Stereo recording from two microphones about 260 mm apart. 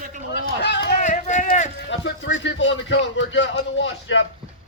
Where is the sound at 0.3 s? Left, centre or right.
Left.